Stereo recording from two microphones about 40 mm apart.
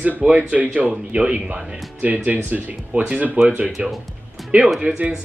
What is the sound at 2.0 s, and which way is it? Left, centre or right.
Speech, right.